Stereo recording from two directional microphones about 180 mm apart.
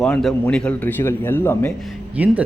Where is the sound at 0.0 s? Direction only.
5° left (ahead or behind).